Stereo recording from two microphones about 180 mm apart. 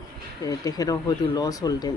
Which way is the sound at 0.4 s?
20° left (ahead or behind).